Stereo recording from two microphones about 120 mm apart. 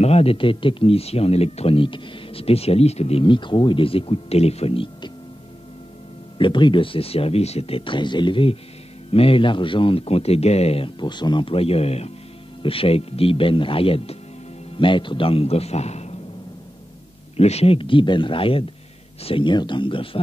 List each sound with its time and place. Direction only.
0.0 s speech: 55° left (ahead or behind)
6.3 s speech: 45° left (ahead or behind); by 10.9 s 60° left (ahead or behind)
11.0 s a man's voice: 40° left (ahead or behind); by 16.2 s 65° left (ahead or behind)
17.4 s speech: 60° left (ahead or behind)